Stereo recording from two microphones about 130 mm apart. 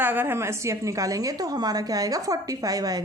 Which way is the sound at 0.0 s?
15° right (ahead or behind).